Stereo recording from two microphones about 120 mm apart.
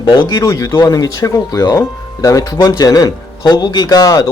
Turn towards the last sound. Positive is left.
turn(degrees=30)  # may be behind; listen again after turning